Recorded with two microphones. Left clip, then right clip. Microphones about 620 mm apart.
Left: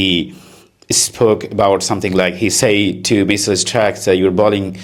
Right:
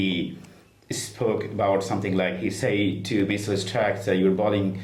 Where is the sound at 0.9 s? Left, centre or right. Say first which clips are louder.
Left 13 dB; left.